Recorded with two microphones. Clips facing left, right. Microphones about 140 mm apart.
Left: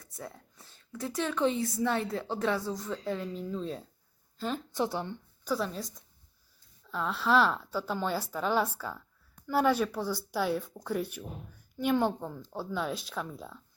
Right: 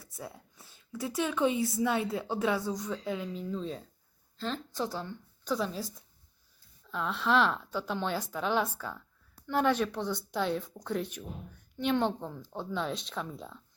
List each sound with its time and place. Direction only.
0.0 s speech: 5° right (ahead or behind)
4.4 s a woman's voice: 10° left (ahead or behind)
5.5 s a woman's voice: centre (ahead or behind)